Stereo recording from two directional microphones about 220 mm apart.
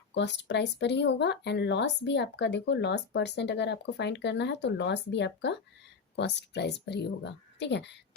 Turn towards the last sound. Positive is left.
turn(degrees=50)  # may be behind; listen again after turning